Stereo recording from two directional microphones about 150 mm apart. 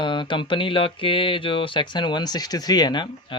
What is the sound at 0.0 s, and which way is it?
Speech, 35° left (ahead or behind).